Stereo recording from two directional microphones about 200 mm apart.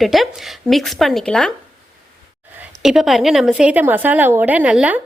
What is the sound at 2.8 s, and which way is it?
A woman's voice, centre (ahead or behind).